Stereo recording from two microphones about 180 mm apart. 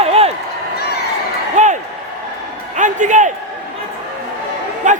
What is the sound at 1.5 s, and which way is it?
Slam, 40° right (ahead or behind).